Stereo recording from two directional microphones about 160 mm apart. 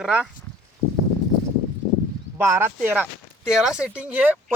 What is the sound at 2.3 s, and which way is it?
Speech, 15° right (ahead or behind).